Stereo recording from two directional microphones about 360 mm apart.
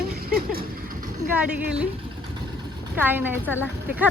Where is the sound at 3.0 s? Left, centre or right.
Centre.